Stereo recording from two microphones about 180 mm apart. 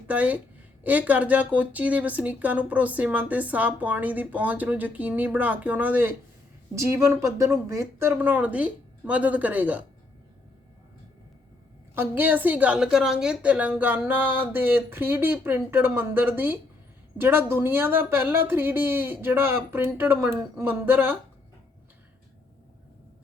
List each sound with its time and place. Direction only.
0.1 s speech: 10° right (ahead or behind)
11.9 s speech: 10° right (ahead or behind)